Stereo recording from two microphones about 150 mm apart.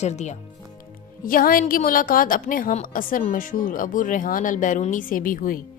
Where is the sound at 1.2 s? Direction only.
70° left (ahead or behind).